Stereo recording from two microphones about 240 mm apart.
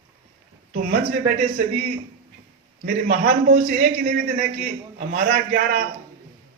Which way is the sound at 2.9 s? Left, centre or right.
Right.